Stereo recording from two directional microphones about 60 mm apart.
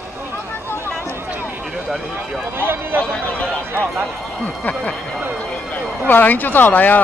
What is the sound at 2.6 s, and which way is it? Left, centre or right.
Speech, right.